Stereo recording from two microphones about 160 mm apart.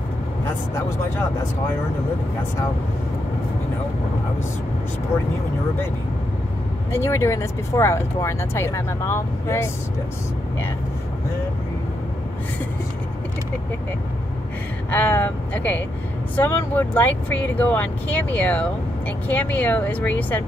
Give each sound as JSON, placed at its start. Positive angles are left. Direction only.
{"t": 6.9, "sound": "speech", "side_deg": 15}
{"t": 14.9, "sound": "speech", "side_deg": 10}